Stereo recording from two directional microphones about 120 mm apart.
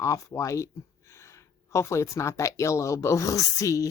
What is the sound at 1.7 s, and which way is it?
Speech, 25° left (ahead or behind).